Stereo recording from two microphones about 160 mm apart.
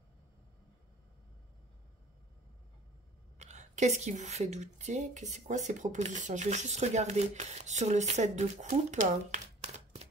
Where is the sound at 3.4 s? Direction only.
45° right (ahead or behind).